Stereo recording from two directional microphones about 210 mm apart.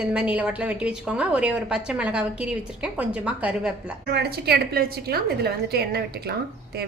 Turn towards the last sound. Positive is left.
turn(degrees=-50)  # may be behind; listen again after turning